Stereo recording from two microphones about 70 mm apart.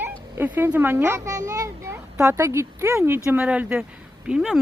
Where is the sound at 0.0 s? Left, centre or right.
Right.